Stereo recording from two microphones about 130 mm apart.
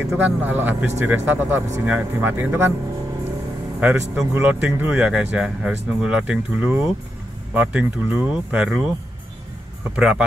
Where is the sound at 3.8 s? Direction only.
15° right (ahead or behind).